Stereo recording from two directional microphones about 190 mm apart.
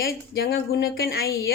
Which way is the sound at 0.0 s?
55° left (ahead or behind).